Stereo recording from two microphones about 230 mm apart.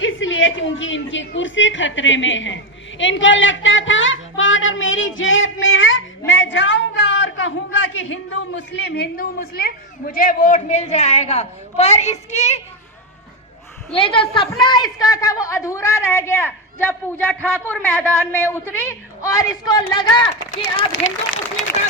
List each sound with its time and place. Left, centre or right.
0.0 s a woman's voice: left
13.9 s a woman's voice: left
20.7 s a woman's voice: left